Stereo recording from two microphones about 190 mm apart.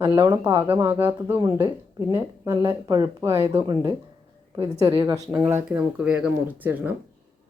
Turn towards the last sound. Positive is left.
turn(degrees=-10)  # may be behind; listen again after turning